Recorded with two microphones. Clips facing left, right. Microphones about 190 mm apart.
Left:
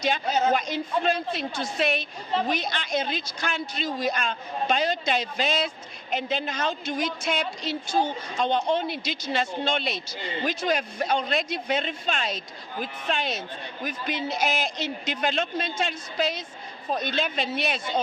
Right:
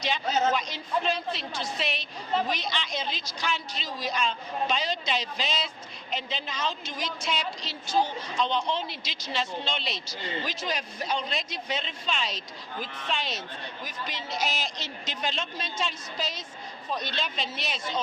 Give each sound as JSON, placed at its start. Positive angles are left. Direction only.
{"t": 0.0, "sound": "a woman's voice", "side_deg": 50}